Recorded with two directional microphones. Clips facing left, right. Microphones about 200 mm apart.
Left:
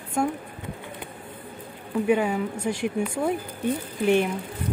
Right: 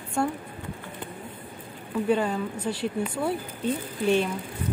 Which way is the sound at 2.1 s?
10° left (ahead or behind).